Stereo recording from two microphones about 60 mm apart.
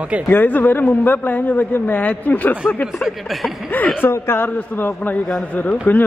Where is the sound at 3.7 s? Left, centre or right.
Left.